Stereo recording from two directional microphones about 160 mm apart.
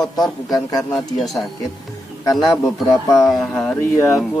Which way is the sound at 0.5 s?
25° left (ahead or behind).